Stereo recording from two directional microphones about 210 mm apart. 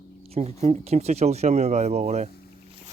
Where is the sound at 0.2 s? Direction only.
30° right (ahead or behind).